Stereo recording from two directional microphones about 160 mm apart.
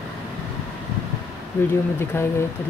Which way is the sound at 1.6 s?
15° left (ahead or behind).